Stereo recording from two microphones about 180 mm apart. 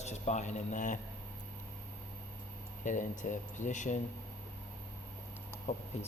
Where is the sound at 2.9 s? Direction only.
45° left (ahead or behind).